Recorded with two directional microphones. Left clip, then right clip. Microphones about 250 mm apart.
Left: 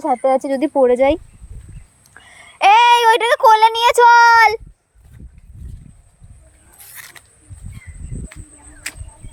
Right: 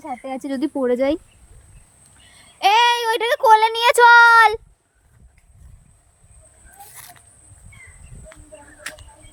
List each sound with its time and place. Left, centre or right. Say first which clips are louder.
0.3 s speech: left 7 dB; centre
2.2 s speech: left 5 dB; centre
8.9 s a sound: left 3 dB; left